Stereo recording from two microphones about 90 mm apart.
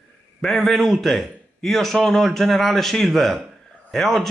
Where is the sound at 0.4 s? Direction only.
Centre (ahead or behind).